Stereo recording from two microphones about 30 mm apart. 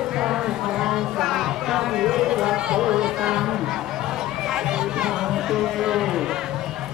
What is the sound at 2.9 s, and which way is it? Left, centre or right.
Music, right.